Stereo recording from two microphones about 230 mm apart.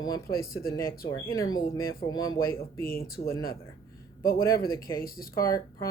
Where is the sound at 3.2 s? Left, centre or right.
Left.